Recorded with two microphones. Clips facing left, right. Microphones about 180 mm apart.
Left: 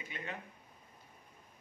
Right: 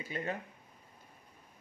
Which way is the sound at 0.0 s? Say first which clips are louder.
Right 7 dB; 40° right (ahead or behind).